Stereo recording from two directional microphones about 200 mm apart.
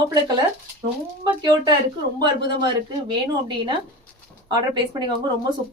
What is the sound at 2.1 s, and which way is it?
A woman's voice, 20° right (ahead or behind).